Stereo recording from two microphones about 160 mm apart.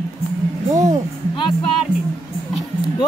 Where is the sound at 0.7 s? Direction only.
50° right (ahead or behind).